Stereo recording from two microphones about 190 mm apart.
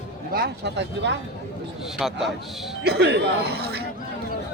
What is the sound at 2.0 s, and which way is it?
Speech, centre (ahead or behind).